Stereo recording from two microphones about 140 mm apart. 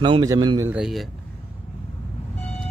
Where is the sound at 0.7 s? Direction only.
5° right (ahead or behind).